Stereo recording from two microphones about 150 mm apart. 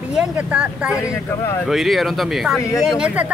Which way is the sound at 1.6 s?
Centre (ahead or behind).